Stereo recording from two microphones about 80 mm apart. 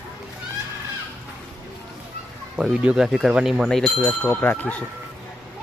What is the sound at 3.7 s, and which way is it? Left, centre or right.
Speech, centre.